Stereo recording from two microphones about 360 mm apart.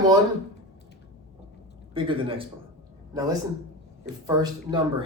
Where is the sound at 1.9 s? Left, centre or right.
Centre.